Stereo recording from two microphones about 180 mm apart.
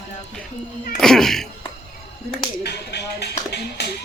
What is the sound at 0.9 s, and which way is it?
Speech, centre (ahead or behind).